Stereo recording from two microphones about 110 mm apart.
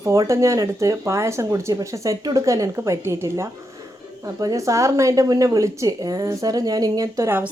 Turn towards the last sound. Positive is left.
turn(degrees=-35)  # may be behind; listen again after turning